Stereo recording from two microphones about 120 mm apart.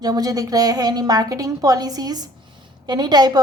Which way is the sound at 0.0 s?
30° right (ahead or behind).